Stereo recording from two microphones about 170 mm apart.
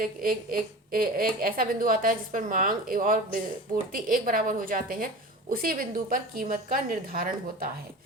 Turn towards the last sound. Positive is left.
turn(degrees=-55)  # may be behind; listen again after turning